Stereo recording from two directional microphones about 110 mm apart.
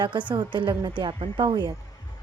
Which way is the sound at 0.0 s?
45° right (ahead or behind).